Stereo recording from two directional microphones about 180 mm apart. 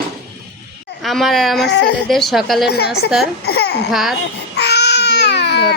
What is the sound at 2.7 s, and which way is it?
A woman's voice, 65° left (ahead or behind).